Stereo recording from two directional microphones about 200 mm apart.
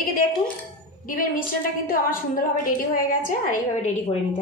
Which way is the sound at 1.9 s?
45° left (ahead or behind).